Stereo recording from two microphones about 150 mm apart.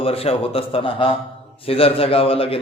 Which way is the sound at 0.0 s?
40° left (ahead or behind).